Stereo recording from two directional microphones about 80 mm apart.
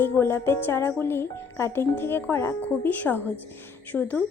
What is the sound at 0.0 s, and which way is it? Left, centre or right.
Speech, left.